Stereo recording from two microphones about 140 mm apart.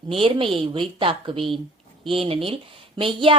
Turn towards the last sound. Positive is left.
turn(degrees=-40)  # may be behind; listen again after turning